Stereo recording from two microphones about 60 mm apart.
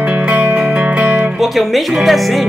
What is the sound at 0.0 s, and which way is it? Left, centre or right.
Music, right.